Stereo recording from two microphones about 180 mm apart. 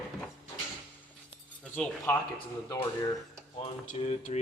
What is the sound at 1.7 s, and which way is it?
Speech, 10° left (ahead or behind).